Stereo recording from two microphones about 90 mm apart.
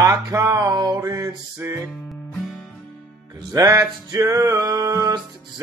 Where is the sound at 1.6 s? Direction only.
30° right (ahead or behind).